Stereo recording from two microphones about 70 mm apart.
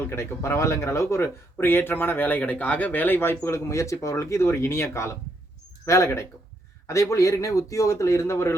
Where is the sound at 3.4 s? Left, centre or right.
Left.